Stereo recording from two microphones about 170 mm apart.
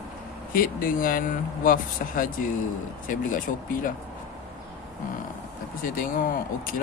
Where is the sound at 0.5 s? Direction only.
55° left (ahead or behind).